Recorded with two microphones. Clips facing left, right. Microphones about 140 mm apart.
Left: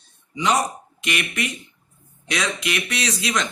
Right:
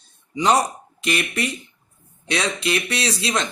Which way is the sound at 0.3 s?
35° right (ahead or behind).